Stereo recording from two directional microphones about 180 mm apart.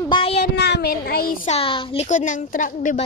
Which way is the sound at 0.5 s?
70° left (ahead or behind).